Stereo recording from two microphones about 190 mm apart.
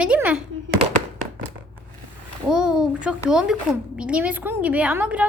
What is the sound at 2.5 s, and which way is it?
A woman's voice, 5° right (ahead or behind).